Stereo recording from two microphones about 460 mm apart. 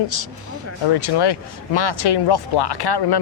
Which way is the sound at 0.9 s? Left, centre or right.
Left.